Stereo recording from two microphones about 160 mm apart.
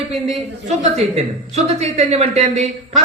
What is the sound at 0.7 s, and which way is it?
A woman's voice, 40° right (ahead or behind).